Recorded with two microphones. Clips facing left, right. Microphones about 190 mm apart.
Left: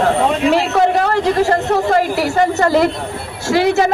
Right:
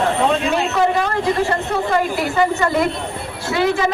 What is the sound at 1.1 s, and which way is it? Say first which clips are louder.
Speech: left 4 dB; 75° left (ahead or behind).